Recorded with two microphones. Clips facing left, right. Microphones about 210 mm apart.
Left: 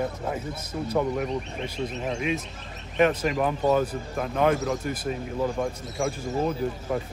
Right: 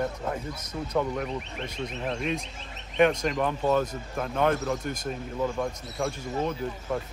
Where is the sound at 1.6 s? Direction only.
30° left (ahead or behind).